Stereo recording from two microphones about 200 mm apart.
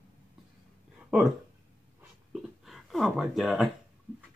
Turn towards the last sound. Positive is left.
turn(degrees=0)  # may be behind; listen again after turning